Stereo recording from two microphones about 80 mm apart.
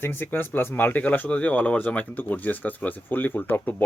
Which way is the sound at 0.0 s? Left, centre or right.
Left.